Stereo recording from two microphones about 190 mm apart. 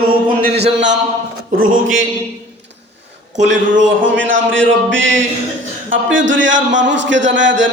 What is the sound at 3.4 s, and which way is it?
A man's voice, 75° right (ahead or behind).